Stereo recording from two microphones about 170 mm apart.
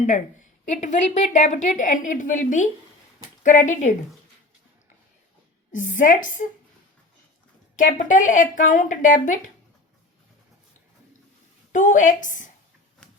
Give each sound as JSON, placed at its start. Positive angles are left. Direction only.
{"t": 0.7, "sound": "speech", "side_deg": 45}
{"t": 5.7, "sound": "speech", "side_deg": 50}
{"t": 7.8, "sound": "speech", "side_deg": 50}
{"t": 11.7, "sound": "speech", "side_deg": 50}